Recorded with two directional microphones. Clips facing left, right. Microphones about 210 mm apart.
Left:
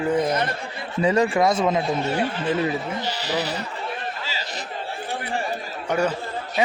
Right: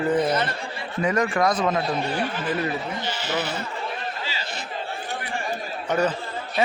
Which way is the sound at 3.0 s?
40° left (ahead or behind).